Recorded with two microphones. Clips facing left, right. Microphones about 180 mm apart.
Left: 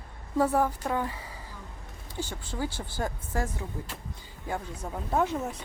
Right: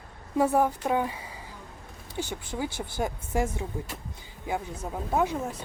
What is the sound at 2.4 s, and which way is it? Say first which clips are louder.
Speech: right 1 dB; 15° right (ahead or behind).